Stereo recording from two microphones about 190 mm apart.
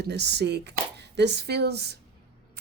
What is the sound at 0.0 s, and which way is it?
Speech, 60° right (ahead or behind).